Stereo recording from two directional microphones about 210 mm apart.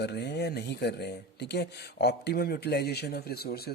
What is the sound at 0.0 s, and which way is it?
Speech, 55° left (ahead or behind).